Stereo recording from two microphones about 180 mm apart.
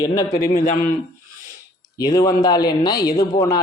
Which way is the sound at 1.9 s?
20° left (ahead or behind).